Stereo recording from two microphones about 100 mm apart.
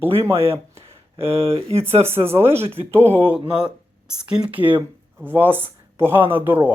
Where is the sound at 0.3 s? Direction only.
70° right (ahead or behind).